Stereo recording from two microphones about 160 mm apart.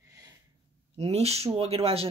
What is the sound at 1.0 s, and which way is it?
Speech, 40° right (ahead or behind).